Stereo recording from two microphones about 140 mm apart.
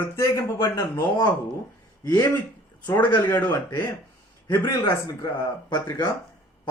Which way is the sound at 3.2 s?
15° left (ahead or behind).